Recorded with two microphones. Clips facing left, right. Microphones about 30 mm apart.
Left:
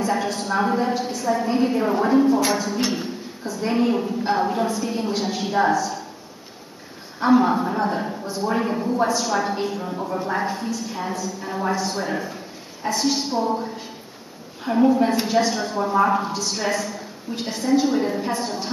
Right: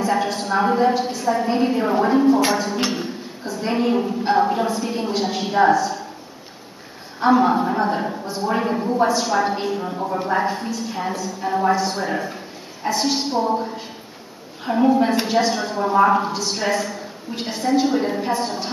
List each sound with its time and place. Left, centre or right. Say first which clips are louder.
0.0 s a woman's voice: right 2 dB; centre
7.2 s a woman's voice: right 1 dB; centre
12.0 s a woman's voice: right 2 dB; centre